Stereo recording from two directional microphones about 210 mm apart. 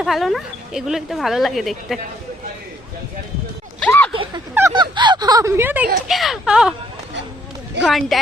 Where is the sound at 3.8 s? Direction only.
5° left (ahead or behind).